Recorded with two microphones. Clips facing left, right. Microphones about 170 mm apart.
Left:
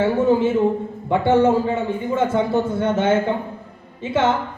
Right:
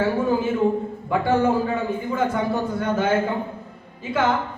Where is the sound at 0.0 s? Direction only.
25° left (ahead or behind).